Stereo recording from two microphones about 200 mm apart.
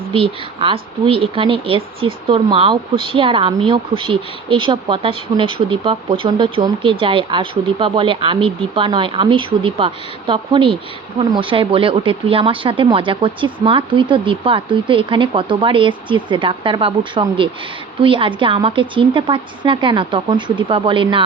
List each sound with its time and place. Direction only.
0.1 s speech: 25° right (ahead or behind)